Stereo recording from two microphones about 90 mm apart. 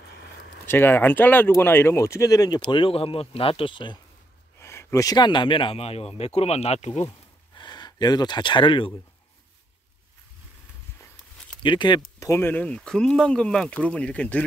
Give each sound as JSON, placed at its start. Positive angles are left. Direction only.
{"t": 0.7, "sound": "speech", "side_deg": 25}
{"t": 2.7, "sound": "speech", "side_deg": 80}
{"t": 4.6, "sound": "a sound", "side_deg": 30}
{"t": 5.1, "sound": "speech", "side_deg": 55}
{"t": 7.5, "sound": "speech", "side_deg": 55}
{"t": 11.6, "sound": "speech", "side_deg": 60}
{"t": 12.4, "sound": "speech", "side_deg": 20}